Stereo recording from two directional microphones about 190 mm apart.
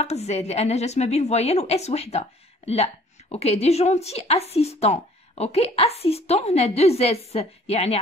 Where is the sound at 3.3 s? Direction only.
35° left (ahead or behind).